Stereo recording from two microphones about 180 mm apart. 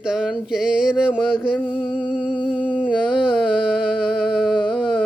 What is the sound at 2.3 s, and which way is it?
Humming, 25° left (ahead or behind).